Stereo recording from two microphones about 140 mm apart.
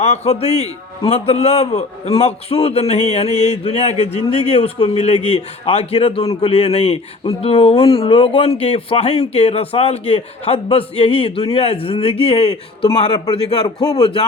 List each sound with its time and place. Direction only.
0.0 s a man's voice: 50° left (ahead or behind)
13.1 s a man's voice: 35° left (ahead or behind)